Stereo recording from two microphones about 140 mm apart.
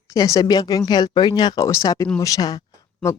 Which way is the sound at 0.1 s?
25° left (ahead or behind).